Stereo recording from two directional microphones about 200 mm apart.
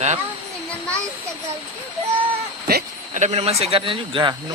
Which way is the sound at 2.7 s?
50° right (ahead or behind).